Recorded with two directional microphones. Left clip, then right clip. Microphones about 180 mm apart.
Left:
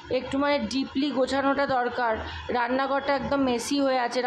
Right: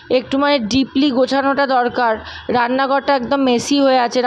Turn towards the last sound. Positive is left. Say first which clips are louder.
# right 11 dB
turn(degrees=-40)  # may be behind; listen again after turning